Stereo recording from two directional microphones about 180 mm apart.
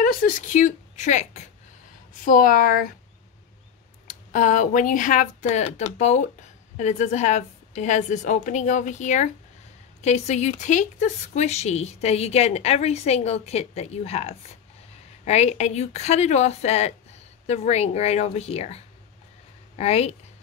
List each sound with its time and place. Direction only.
0.0 s speech: 50° left (ahead or behind)
4.1 s speech: 45° left (ahead or behind)
19.8 s speech: 35° left (ahead or behind)